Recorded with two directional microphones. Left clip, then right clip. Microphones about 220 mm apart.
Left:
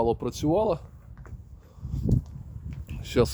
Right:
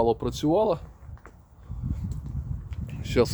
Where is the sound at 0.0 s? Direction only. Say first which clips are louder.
Right 2 dB; 5° left (ahead or behind).